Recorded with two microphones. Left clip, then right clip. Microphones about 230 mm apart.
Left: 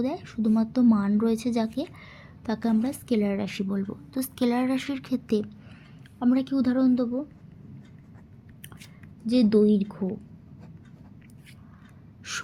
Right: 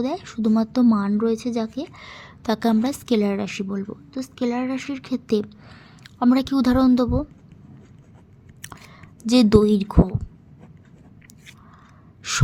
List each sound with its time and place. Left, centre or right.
0.0 s a woman's voice: centre
2.0 s a woman's voice: right
9.2 s a woman's voice: right
12.2 s gasp: centre